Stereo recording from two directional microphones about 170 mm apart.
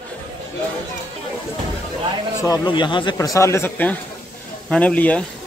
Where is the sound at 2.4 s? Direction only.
25° left (ahead or behind); by 5.2 s 10° left (ahead or behind).